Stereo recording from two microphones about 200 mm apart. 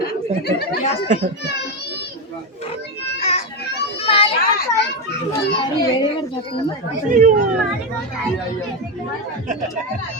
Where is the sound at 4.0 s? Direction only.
30° left (ahead or behind).